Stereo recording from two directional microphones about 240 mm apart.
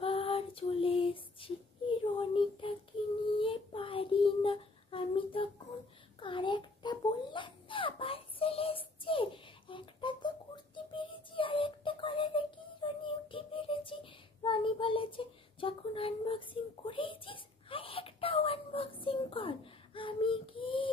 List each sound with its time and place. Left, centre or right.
0.0 s female singing: left
2.0 s child singing: left
6.1 s a sound: left